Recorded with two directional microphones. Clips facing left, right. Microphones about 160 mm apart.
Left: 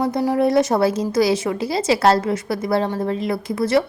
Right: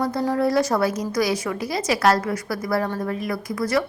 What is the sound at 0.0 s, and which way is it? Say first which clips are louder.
A woman's voice: left 3 dB; 20° left (ahead or behind).